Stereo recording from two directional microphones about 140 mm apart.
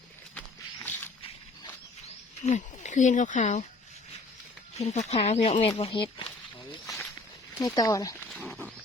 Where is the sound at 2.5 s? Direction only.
55° left (ahead or behind).